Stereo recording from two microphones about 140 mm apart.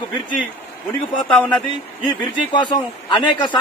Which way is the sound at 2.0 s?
35° left (ahead or behind).